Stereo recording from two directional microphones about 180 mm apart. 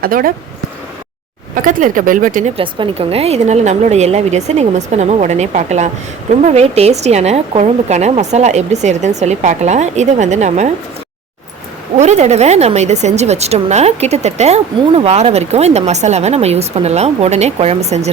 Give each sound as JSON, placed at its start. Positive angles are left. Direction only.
{"t": 0.0, "sound": "speech", "side_deg": -55}
{"t": 1.6, "sound": "speech", "side_deg": -50}
{"t": 2.6, "sound": "speech", "side_deg": -30}
{"t": 11.9, "sound": "speech", "side_deg": -40}